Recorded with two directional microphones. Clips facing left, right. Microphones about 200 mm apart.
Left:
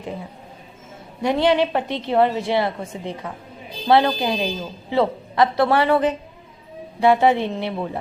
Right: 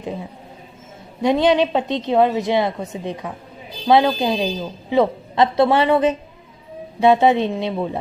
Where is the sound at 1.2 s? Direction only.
20° right (ahead or behind).